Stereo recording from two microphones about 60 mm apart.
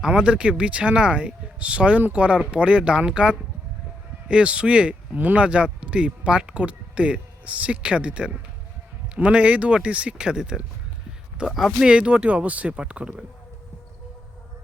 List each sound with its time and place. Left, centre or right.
0.0 s speech: centre
11.9 s speech: centre